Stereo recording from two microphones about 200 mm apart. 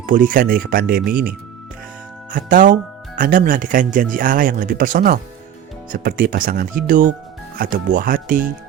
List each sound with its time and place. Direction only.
0.0 s speech: 40° right (ahead or behind)
2.3 s speech: 40° right (ahead or behind)